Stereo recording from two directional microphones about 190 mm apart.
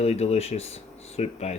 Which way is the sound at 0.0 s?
35° left (ahead or behind).